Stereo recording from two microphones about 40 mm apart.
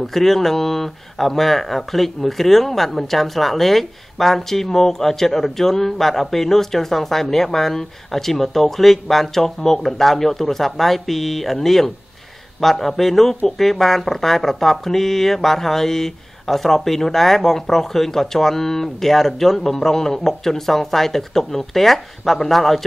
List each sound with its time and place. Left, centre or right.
0.0 s speech: centre